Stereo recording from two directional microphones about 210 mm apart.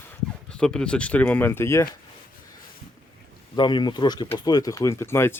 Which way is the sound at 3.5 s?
20° left (ahead or behind).